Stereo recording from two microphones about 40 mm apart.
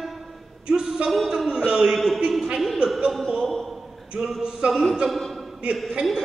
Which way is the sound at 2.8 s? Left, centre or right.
Right.